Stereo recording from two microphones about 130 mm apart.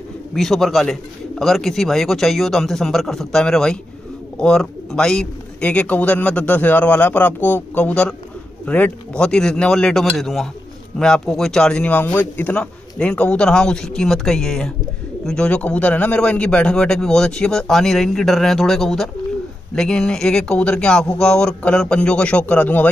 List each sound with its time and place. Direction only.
0.3 s a man's voice: centre (ahead or behind)